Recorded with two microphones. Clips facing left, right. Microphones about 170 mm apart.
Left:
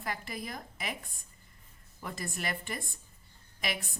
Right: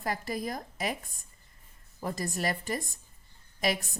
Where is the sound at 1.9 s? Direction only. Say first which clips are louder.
Right 6 dB; 40° right (ahead or behind).